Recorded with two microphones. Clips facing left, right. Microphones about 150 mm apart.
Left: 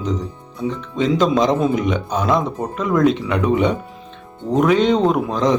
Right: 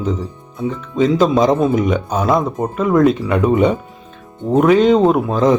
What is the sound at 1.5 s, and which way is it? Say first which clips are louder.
Speech: right 3 dB; 50° right (ahead or behind).